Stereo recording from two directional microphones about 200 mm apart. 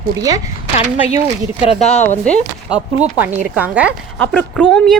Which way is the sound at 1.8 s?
35° left (ahead or behind).